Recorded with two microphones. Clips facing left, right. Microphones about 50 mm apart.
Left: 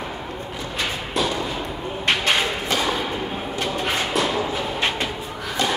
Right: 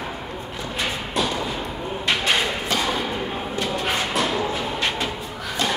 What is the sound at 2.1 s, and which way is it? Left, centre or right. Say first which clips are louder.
Thump: left 1 dB; centre.